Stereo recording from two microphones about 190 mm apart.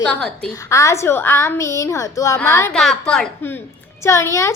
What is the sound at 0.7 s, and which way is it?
A woman's voice, 15° left (ahead or behind).